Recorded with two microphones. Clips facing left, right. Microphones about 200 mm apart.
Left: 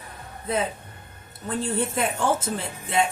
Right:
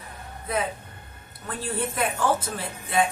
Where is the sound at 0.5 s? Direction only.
25° left (ahead or behind).